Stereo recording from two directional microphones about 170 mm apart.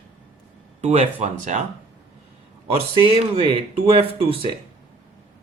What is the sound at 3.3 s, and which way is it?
Speech, 35° right (ahead or behind).